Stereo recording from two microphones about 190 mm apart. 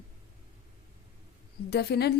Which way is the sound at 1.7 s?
60° left (ahead or behind).